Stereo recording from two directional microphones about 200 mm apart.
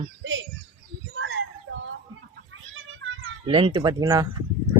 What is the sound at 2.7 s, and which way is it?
Children playing, 85° right.